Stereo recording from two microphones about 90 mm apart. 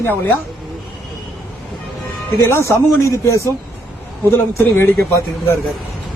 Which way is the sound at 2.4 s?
30° left (ahead or behind).